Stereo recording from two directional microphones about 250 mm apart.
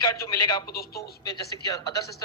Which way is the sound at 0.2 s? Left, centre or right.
Centre.